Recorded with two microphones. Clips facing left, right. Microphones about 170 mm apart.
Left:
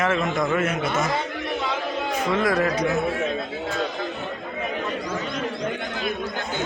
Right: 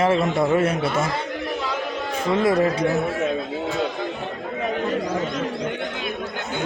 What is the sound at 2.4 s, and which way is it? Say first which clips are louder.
Speech: right 4 dB; 30° right (ahead or behind).